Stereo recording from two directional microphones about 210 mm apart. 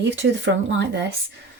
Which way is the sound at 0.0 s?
55° right (ahead or behind).